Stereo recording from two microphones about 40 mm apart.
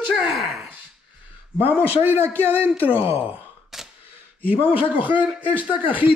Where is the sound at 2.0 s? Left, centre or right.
Right.